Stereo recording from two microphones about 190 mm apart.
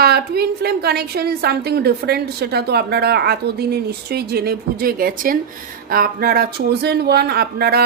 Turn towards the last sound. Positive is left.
turn(degrees=-55)  # may be behind; listen again after turning